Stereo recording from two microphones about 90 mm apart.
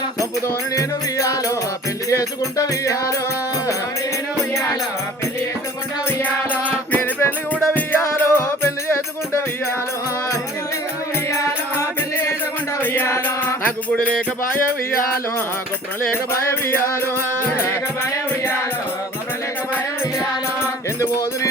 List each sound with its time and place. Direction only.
0.2 s music: 35° left (ahead or behind)
4.5 s music: 35° left (ahead or behind)
6.9 s music: 20° left (ahead or behind)
11.3 s music: 35° left (ahead or behind)
16.3 s music: 30° left (ahead or behind)
21.0 s music: 35° left (ahead or behind)